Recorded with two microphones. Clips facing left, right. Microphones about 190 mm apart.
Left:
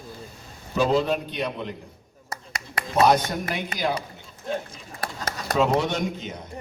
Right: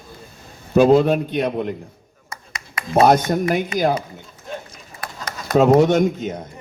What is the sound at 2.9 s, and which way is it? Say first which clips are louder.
A man's voice: right 5 dB; 50° right (ahead or behind).